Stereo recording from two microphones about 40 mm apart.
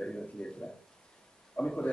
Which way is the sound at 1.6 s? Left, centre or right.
Left.